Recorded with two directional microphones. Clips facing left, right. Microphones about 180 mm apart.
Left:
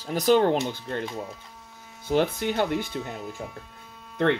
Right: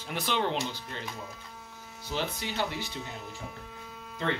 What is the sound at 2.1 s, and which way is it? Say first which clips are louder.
Speech: left 10 dB; 55° left (ahead or behind).